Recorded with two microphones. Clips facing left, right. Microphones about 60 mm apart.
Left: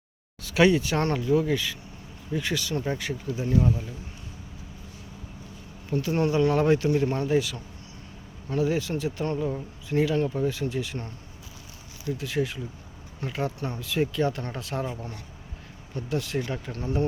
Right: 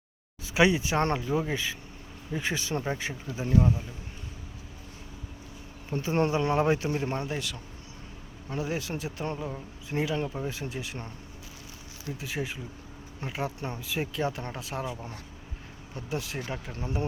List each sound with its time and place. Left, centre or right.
0.4 s speech: centre
1.0 s speech: right
3.5 s speech: centre
5.9 s speech: right
7.3 s speech: centre
8.6 s speech: centre
12.1 s speech: centre
16.7 s speech: right